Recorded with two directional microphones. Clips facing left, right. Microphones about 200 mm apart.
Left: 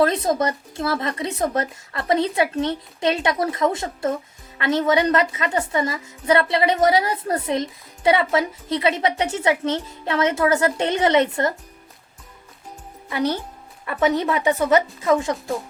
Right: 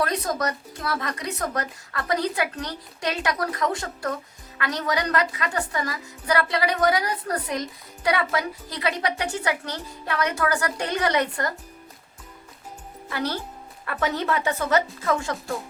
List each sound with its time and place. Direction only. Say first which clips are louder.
0.0 s a woman's voice: left 6 dB; 25° left (ahead or behind)
13.1 s speech: left 5 dB; 20° left (ahead or behind)